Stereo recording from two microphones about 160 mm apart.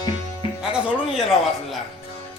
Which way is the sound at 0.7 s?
5° right (ahead or behind).